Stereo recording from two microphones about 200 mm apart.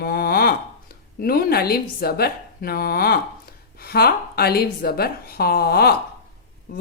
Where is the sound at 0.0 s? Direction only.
50° left (ahead or behind).